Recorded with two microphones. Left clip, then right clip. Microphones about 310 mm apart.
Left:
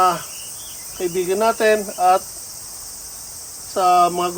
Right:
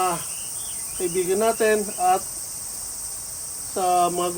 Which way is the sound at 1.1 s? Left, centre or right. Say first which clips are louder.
Left 3 dB; centre.